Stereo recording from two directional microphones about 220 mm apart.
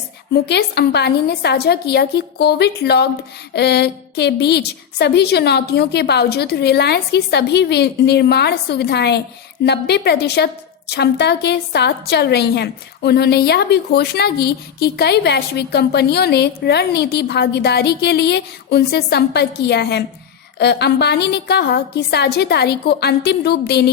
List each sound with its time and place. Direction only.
0.4 s a woman's voice: 50° left (ahead or behind)